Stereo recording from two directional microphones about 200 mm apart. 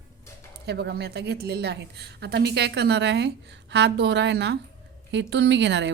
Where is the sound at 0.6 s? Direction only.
55° right (ahead or behind).